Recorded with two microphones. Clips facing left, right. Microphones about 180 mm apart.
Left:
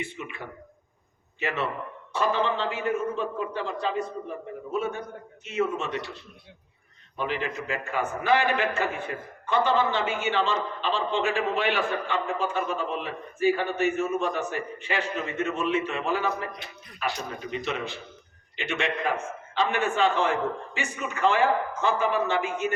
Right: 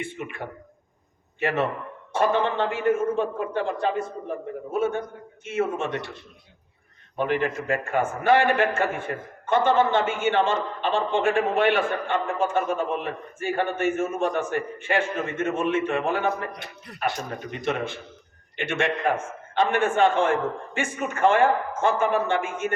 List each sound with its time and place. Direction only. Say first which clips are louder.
0.0 s a man's voice: right 3 dB; 50° right (ahead or behind)
7.2 s a man's voice: right 5 dB; 55° right (ahead or behind)